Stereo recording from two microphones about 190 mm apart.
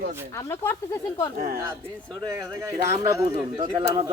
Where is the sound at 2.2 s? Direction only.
15° right (ahead or behind).